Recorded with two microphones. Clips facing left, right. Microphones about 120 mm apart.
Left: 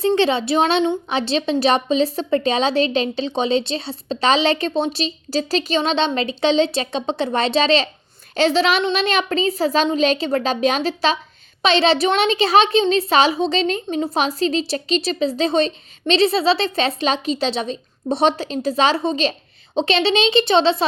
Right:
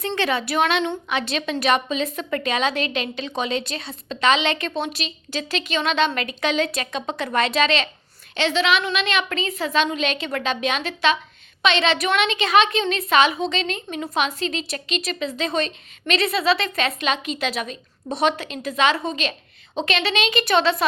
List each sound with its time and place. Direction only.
0.2 s a child's voice: 25° left (ahead or behind)